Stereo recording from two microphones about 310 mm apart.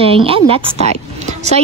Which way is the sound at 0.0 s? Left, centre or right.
Centre.